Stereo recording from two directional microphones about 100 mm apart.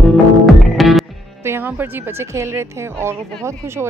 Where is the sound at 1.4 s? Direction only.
20° right (ahead or behind).